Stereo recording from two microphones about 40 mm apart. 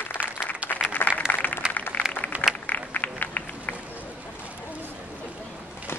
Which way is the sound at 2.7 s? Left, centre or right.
Left.